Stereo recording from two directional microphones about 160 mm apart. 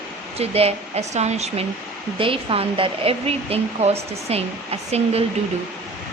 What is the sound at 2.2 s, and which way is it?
Speech, 35° right (ahead or behind).